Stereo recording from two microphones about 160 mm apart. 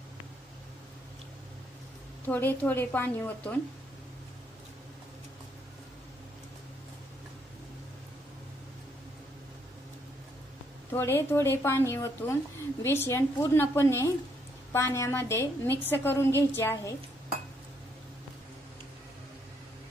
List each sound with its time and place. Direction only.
2.2 s speech: 10° left (ahead or behind)
10.9 s speech: 15° left (ahead or behind)